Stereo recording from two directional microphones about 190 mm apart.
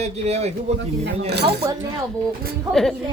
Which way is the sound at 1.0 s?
60° right (ahead or behind).